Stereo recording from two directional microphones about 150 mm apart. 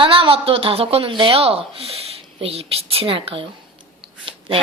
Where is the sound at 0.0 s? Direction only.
35° right (ahead or behind).